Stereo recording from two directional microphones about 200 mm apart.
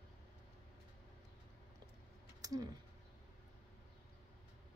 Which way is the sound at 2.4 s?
20° right (ahead or behind).